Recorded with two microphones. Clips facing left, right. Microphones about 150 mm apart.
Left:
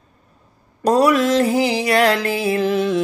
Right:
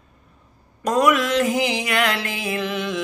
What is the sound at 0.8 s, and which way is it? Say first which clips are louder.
Speech: left 4 dB; 35° left (ahead or behind).